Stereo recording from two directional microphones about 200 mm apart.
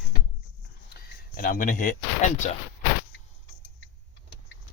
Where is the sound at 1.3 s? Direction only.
45° left (ahead or behind).